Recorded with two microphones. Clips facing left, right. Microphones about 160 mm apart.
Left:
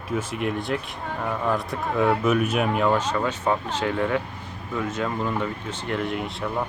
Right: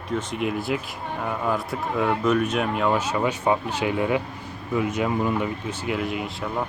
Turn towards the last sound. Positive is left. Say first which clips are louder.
# left 1 dB
turn(degrees=0)  # may be behind; listen again after turning